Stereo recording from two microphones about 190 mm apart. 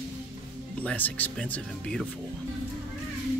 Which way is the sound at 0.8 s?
10° left (ahead or behind).